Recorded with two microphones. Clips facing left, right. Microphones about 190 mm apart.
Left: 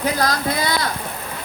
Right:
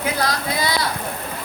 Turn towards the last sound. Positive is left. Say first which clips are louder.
# left 2 dB
turn(degrees=45)  # may be behind; listen again after turning